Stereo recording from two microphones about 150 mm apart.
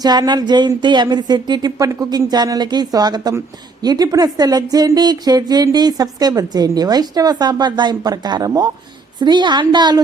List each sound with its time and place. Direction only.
0.0 s a woman's voice: 30° right (ahead or behind)